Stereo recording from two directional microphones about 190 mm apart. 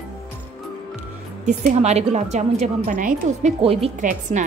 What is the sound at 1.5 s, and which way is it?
Speech, 35° right (ahead or behind).